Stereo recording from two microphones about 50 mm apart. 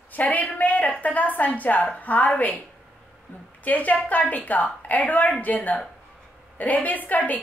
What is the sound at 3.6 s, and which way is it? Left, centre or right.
A woman's voice, left.